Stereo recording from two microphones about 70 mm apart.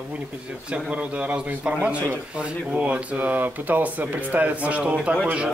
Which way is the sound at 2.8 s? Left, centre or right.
Right.